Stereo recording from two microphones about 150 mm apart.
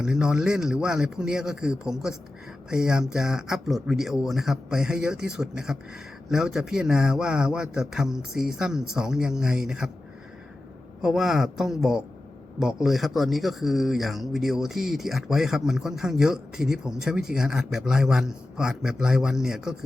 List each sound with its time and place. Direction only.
0.0 s speech: 5° right (ahead or behind)
11.0 s speech: 5° right (ahead or behind)